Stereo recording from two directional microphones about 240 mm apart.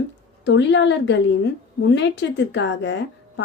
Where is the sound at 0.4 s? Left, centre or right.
Left.